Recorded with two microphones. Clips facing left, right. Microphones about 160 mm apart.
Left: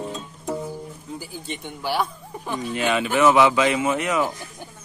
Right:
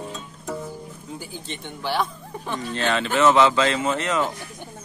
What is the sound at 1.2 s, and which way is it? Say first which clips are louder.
Speech: left 1 dB; 5° left (ahead or behind).